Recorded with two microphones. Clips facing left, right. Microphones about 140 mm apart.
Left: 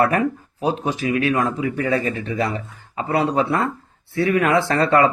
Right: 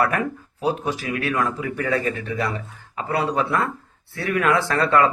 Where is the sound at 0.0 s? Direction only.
25° left (ahead or behind).